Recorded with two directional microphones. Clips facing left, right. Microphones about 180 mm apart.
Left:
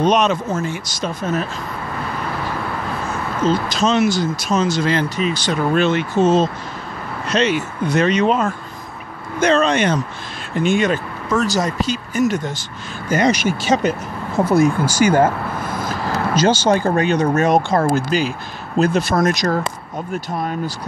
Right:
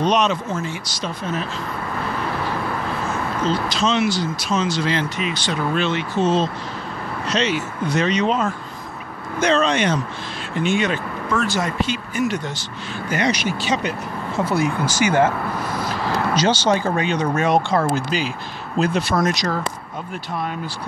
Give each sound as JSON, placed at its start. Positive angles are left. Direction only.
{"t": 0.0, "sound": "speech", "side_deg": 50}
{"t": 3.4, "sound": "speech", "side_deg": 45}